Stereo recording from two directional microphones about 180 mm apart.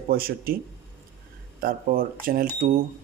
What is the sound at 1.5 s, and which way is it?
Speech, 50° right (ahead or behind).